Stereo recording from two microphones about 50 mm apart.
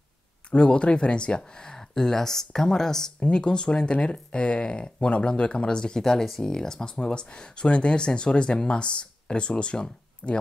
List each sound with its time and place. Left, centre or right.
0.5 s speech: left